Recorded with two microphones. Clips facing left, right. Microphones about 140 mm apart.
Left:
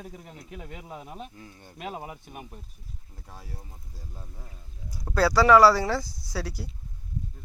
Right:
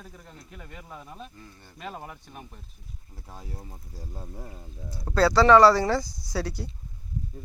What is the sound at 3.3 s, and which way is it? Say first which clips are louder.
Speech: right 3 dB; 20° right (ahead or behind).